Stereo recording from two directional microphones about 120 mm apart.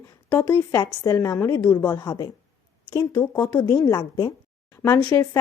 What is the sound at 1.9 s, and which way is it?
Speech, 30° left (ahead or behind).